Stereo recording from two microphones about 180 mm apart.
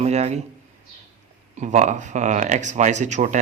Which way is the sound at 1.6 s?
40° right (ahead or behind).